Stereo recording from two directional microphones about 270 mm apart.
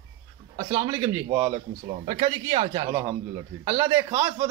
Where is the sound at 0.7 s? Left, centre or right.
Centre.